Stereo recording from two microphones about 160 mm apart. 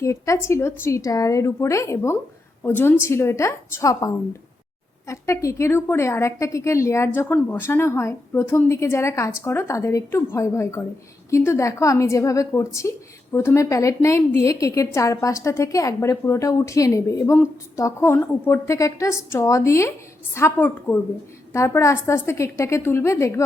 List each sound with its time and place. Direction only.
0.0 s a woman's voice: 20° left (ahead or behind)